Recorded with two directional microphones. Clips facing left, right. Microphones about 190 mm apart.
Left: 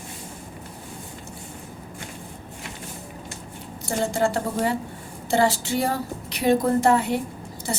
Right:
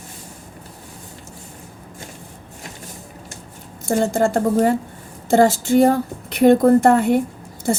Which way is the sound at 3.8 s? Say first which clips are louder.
Right 5 dB; 50° right (ahead or behind).